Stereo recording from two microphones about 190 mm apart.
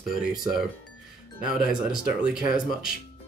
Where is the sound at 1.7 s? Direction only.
45° left (ahead or behind).